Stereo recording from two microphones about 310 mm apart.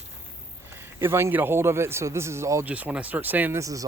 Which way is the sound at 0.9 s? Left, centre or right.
Centre.